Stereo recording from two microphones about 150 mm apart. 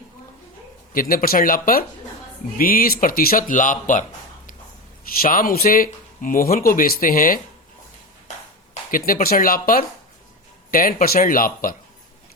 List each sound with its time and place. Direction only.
0.9 s speech: 70° left (ahead or behind)
5.2 s speech: 70° left (ahead or behind)
8.9 s speech: 70° left (ahead or behind)